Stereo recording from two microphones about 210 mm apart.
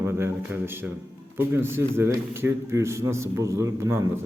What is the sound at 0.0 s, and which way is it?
A man's voice, 10° right (ahead or behind).